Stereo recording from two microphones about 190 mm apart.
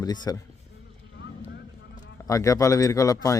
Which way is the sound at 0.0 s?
20° left (ahead or behind).